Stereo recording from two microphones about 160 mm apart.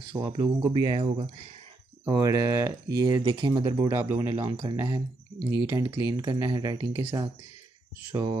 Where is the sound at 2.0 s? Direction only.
20° right (ahead or behind).